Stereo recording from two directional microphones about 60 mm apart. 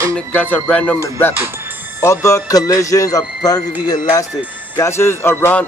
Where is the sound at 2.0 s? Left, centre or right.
Left.